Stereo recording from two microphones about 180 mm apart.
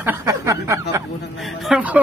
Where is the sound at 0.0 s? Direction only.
15° right (ahead or behind).